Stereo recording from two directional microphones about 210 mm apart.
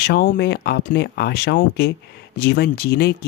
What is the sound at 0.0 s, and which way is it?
Speech, 50° left (ahead or behind).